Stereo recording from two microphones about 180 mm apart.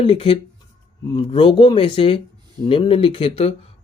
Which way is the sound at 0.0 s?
30° left (ahead or behind).